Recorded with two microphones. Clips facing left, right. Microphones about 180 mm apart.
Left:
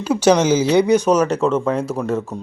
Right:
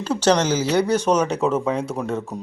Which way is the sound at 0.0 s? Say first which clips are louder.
Left 4 dB; 10° left (ahead or behind).